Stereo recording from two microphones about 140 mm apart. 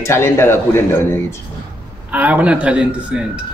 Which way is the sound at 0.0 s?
20° left (ahead or behind).